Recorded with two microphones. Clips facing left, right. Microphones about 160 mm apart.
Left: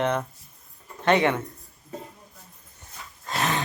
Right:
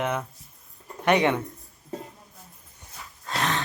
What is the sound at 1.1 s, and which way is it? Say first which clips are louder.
Speech: even; 15° right (ahead or behind).